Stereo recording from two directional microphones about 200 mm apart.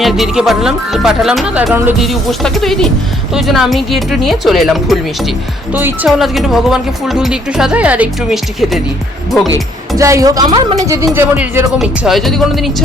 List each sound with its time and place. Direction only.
0.0 s speech: centre (ahead or behind)
10.0 s speech: 15° right (ahead or behind)
11.8 s speech: centre (ahead or behind)